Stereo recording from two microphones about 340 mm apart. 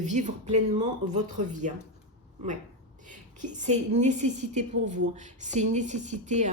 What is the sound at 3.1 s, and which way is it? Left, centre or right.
A woman's voice, right.